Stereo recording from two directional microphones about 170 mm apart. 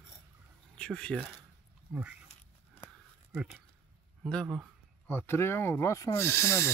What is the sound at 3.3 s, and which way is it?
Speech, 5° right (ahead or behind).